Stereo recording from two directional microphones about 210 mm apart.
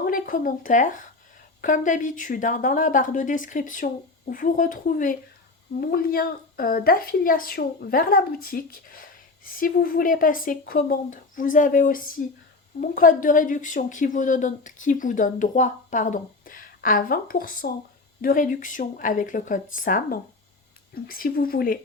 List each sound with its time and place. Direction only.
0.0 s a woman's voice: 40° left (ahead or behind)